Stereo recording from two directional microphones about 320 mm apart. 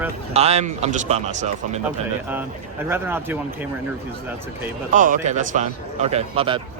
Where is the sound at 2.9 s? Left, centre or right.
Centre.